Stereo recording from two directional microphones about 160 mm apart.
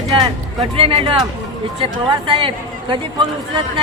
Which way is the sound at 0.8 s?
35° right (ahead or behind).